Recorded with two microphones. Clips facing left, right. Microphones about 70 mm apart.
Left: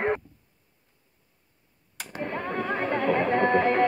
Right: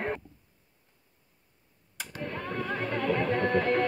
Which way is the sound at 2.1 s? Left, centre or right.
Left.